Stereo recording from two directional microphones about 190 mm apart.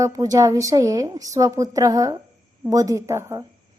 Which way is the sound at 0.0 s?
15° right (ahead or behind).